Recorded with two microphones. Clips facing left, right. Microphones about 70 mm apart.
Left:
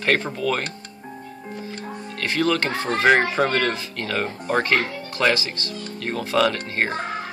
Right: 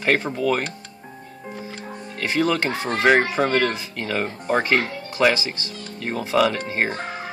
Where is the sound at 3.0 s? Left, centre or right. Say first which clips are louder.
Even; centre.